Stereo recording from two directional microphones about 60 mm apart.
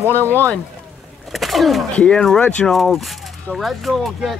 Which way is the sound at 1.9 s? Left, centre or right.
Centre.